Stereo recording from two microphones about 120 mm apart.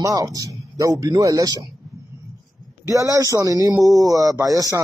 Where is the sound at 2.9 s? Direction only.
25° right (ahead or behind).